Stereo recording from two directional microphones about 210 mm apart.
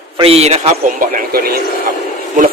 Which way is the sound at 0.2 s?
30° right (ahead or behind).